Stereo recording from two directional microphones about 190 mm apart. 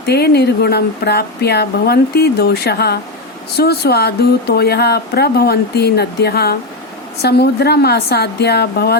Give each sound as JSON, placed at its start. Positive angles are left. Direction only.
{"t": 0.0, "sound": "speech", "side_deg": 60}